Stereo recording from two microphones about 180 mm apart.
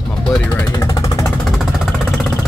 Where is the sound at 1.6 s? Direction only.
Centre (ahead or behind).